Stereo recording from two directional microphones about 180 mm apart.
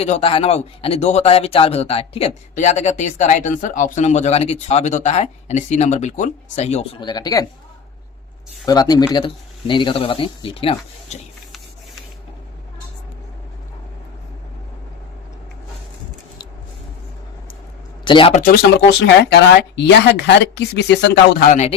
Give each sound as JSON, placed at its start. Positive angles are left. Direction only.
{"t": 0.0, "sound": "speech", "side_deg": 35}
{"t": 7.0, "sound": "speech", "side_deg": 25}
{"t": 8.6, "sound": "speech", "side_deg": 20}
{"t": 18.0, "sound": "speech", "side_deg": 25}
{"t": 18.3, "sound": "speech", "side_deg": 55}
{"t": 21.4, "sound": "speech", "side_deg": 40}